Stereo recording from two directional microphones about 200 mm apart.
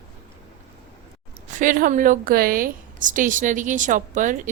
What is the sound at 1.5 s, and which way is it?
A woman's voice, 45° right (ahead or behind).